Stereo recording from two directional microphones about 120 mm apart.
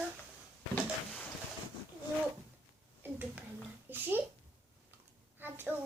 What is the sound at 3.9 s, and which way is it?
Speech, 15° right (ahead or behind).